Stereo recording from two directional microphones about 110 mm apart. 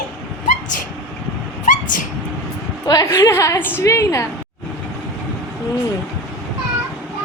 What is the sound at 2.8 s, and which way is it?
A woman's voice, 30° left (ahead or behind).